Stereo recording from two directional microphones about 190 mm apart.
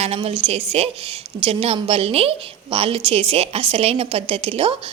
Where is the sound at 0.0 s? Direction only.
30° right (ahead or behind).